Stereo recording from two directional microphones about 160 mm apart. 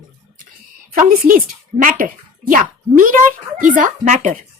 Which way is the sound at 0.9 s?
55° right (ahead or behind).